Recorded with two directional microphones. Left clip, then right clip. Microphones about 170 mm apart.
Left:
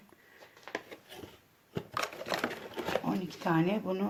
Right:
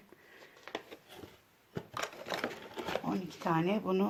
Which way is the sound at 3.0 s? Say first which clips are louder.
Left 2 dB; 30° right (ahead or behind).